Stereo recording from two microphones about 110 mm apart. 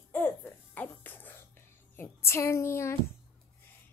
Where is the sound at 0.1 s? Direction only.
20° left (ahead or behind).